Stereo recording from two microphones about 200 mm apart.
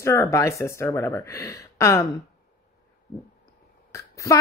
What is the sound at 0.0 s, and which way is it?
A woman's voice, 15° left (ahead or behind).